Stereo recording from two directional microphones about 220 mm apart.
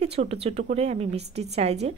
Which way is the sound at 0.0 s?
30° right (ahead or behind).